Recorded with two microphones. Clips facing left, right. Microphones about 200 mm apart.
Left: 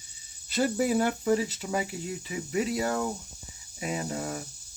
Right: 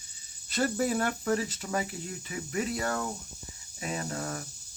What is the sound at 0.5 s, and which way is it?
Speech, 5° left (ahead or behind).